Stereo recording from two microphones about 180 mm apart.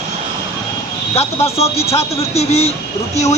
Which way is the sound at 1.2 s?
35° left (ahead or behind).